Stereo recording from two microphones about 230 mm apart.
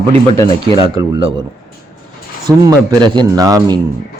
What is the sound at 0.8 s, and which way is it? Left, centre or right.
Speech, centre.